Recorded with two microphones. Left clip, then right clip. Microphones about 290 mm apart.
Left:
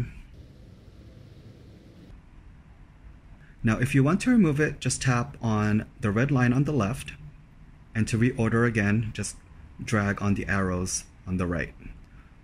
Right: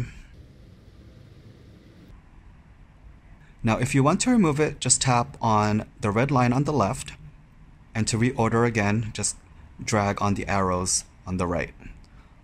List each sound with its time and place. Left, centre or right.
3.6 s speech: centre